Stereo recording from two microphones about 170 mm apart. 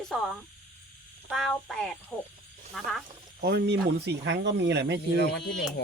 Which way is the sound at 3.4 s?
85° right.